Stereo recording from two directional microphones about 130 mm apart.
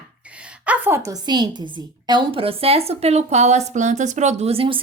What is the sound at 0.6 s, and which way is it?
A woman's voice, 10° right (ahead or behind).